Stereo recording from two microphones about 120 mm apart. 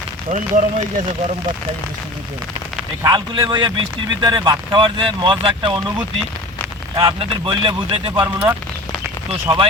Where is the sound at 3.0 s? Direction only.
35° right (ahead or behind).